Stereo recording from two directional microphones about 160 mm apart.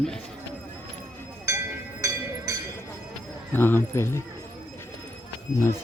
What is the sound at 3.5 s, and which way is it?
Speech, 15° left (ahead or behind).